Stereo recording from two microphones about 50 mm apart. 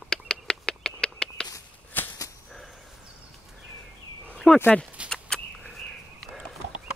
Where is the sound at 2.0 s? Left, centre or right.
Left.